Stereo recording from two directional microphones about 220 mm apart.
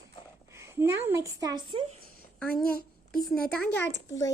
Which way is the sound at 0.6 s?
10° right (ahead or behind).